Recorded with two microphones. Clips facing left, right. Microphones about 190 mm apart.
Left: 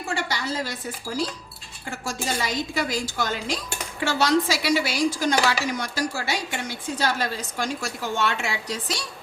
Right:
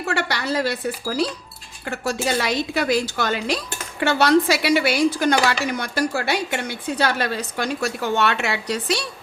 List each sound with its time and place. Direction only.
0.0 s a woman's voice: 65° right (ahead or behind)